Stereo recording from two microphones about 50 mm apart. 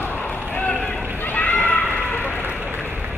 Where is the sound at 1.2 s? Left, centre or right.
Left.